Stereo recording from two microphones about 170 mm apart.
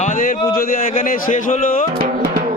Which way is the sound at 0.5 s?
55° left (ahead or behind).